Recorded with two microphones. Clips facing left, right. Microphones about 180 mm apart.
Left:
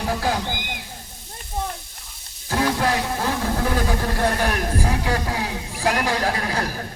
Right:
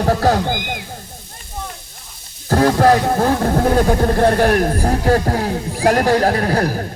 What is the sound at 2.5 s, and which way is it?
Speech, 45° right (ahead or behind).